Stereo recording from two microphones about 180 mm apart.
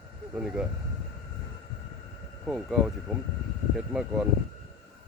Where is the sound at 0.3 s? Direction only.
5° right (ahead or behind).